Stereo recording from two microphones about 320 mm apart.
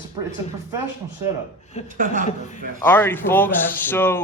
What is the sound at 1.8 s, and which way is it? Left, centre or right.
Speech, left.